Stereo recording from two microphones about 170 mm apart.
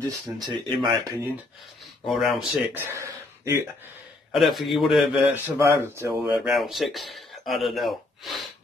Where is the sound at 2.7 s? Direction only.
15° right (ahead or behind).